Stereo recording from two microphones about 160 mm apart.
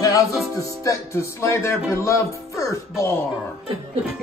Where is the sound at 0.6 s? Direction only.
20° left (ahead or behind).